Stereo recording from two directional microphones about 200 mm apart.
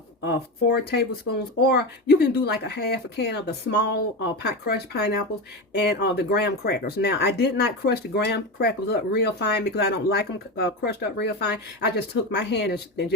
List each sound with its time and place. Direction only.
0.3 s speech: 55° left (ahead or behind)